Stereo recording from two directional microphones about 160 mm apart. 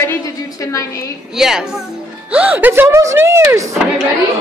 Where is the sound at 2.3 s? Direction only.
10° right (ahead or behind).